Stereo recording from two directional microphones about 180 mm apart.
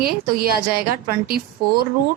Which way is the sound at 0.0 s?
55° right (ahead or behind).